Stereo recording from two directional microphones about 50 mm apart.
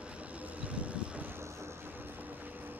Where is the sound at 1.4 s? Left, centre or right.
Right.